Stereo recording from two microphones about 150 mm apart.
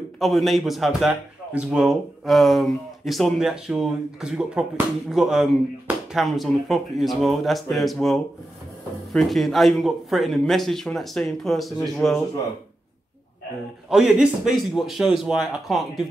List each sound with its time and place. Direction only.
0.2 s a man's voice: centre (ahead or behind)
13.8 s a man's voice: 5° right (ahead or behind)